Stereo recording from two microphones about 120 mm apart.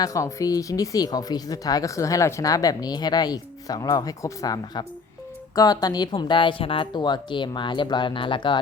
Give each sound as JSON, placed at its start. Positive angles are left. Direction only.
{"t": 0.0, "sound": "speech", "side_deg": 25}